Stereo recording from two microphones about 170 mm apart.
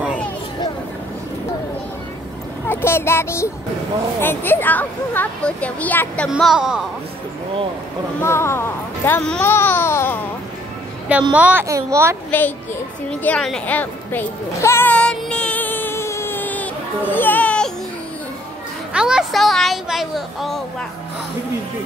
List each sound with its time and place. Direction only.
2.7 s a child's voice: 15° left (ahead or behind)
6.3 s speech: 5° right (ahead or behind)
8.2 s speech: 15° left (ahead or behind)
11.3 s a child's voice: 10° right (ahead or behind)
12.3 s a child's voice: 10° left (ahead or behind)
13.2 s music: 5° left (ahead or behind)
18.9 s speech: 5° right (ahead or behind)